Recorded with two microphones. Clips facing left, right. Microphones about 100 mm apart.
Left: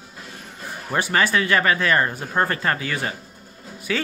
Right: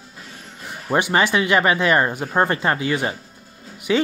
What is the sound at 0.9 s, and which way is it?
Speech, 20° right (ahead or behind).